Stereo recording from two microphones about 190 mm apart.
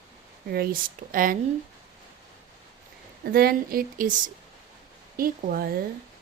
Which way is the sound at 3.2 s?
55° right (ahead or behind).